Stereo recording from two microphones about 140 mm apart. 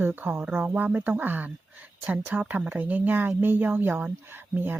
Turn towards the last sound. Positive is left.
turn(degrees=-15)  # may be behind; listen again after turning